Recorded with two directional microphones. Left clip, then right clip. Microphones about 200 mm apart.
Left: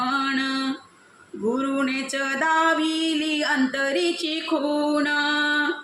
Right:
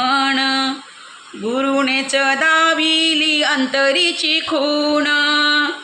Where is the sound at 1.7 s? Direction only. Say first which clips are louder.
Right 9 dB; 10° right (ahead or behind).